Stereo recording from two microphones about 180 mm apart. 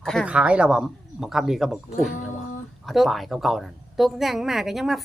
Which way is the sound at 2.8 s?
Centre (ahead or behind).